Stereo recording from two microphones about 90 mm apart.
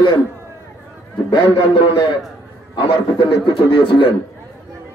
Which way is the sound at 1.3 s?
60° left (ahead or behind).